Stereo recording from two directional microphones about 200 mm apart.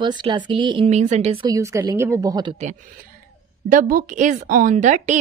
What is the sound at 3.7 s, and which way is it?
Speech, 45° right (ahead or behind).